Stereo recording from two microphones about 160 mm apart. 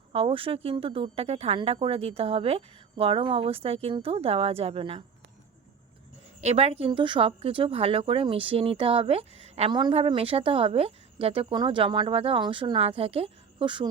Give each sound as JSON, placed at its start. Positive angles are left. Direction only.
{"t": 0.1, "sound": "speech", "side_deg": -35}
{"t": 6.4, "sound": "speech", "side_deg": -40}